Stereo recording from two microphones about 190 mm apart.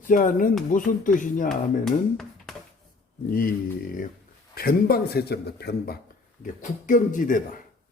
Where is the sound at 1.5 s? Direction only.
Centre (ahead or behind).